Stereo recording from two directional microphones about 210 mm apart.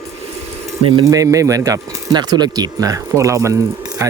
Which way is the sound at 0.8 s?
20° right (ahead or behind).